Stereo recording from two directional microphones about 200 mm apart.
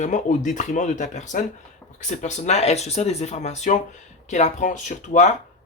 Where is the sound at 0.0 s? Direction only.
40° left (ahead or behind).